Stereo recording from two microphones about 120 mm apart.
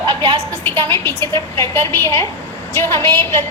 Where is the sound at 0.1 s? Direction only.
40° right (ahead or behind).